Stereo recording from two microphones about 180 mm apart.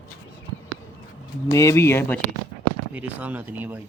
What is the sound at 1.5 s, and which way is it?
Speech, 15° left (ahead or behind).